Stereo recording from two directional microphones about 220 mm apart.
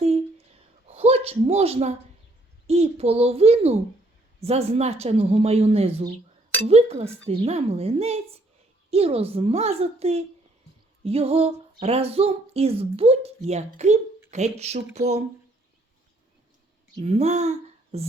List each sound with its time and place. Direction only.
0.9 s speech: 30° right (ahead or behind)
17.0 s speech: 30° right (ahead or behind)